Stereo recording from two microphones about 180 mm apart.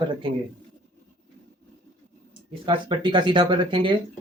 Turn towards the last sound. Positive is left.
turn(degrees=-25)  # may be behind; listen again after turning